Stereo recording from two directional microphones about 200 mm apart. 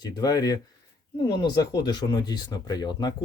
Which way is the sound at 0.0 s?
20° left (ahead or behind).